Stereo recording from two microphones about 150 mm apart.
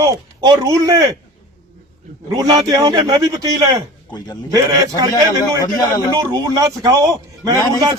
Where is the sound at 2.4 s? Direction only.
25° right (ahead or behind).